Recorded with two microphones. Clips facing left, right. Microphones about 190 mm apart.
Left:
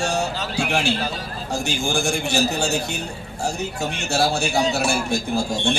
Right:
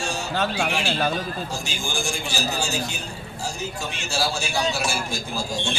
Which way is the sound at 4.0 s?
65° left (ahead or behind).